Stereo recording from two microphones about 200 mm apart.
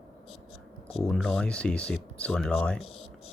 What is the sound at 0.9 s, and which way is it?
Speech, centre (ahead or behind).